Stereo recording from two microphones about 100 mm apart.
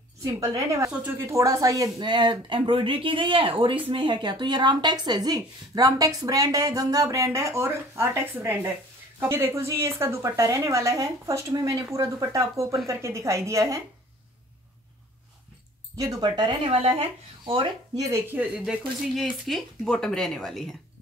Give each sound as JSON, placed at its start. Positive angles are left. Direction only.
{"t": 0.2, "sound": "speech", "side_deg": -35}
{"t": 16.0, "sound": "speech", "side_deg": -40}
{"t": 16.6, "sound": "speech", "side_deg": -70}
{"t": 17.9, "sound": "speech", "side_deg": -30}
{"t": 18.3, "sound": "speech", "side_deg": -15}
{"t": 19.4, "sound": "a woman's voice", "side_deg": 0}